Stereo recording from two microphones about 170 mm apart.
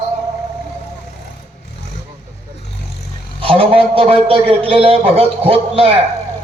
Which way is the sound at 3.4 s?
35° right (ahead or behind).